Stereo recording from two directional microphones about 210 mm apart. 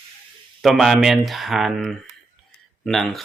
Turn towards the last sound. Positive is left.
turn(degrees=0)  # may be behind; listen again after turning